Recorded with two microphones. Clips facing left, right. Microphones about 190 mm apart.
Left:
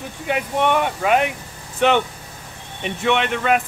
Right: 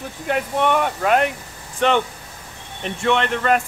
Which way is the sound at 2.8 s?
5° left (ahead or behind).